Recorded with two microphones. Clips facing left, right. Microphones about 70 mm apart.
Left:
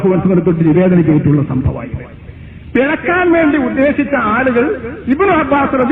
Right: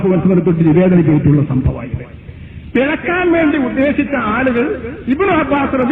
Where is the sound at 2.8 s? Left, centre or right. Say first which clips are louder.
Left 3 dB; left.